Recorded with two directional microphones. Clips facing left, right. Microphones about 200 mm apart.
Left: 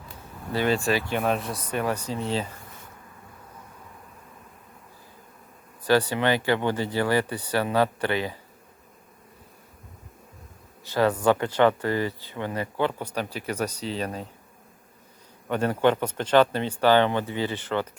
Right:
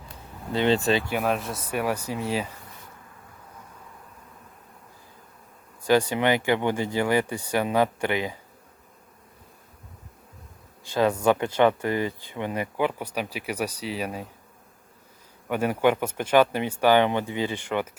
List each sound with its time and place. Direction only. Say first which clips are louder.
0.5 s speech: right 2 dB; 20° right (ahead or behind)
1.1 s speech: even; centre (ahead or behind)
5.8 s speech: right 1 dB; 10° right (ahead or behind)
10.9 s speech: even; 10° right (ahead or behind)
15.4 s speech: even; 10° right (ahead or behind)